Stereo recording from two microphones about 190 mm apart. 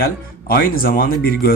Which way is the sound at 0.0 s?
50° left (ahead or behind).